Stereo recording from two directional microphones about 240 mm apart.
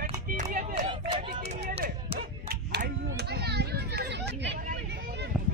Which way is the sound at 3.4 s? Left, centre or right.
Right.